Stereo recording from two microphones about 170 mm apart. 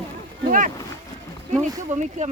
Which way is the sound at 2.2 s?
45° right (ahead or behind).